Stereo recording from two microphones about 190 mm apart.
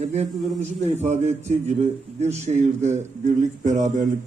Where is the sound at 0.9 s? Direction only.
35° right (ahead or behind).